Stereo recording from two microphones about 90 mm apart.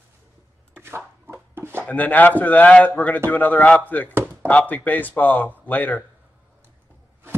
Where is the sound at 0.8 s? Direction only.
25° right (ahead or behind).